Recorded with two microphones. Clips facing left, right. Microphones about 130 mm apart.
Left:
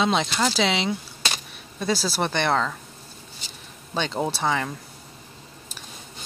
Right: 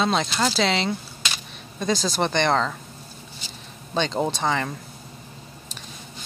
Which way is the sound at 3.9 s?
5° left (ahead or behind).